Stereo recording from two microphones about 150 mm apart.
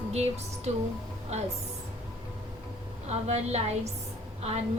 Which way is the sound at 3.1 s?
45° right (ahead or behind).